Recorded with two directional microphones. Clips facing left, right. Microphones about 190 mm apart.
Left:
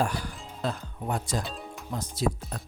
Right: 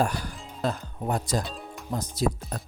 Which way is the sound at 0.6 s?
40° right (ahead or behind).